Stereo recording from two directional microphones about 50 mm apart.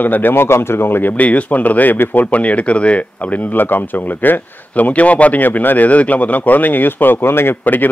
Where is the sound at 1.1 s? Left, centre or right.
Left.